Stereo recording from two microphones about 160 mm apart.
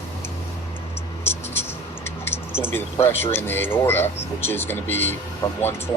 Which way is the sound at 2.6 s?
15° left (ahead or behind).